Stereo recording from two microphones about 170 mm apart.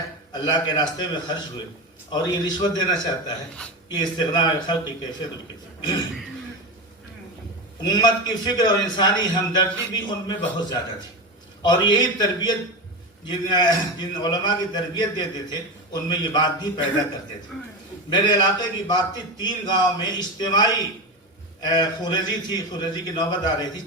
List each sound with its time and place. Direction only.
0.3 s a man's voice: 25° left (ahead or behind)
2.0 s a man's voice: 25° left (ahead or behind)
5.8 s a man's voice: 25° left (ahead or behind)
7.8 s a man's voice: 25° left (ahead or behind)
18.1 s a man's voice: 25° left (ahead or behind)